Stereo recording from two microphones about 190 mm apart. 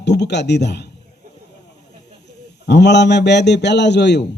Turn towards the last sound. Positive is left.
turn(degrees=65)  # may be behind; listen again after turning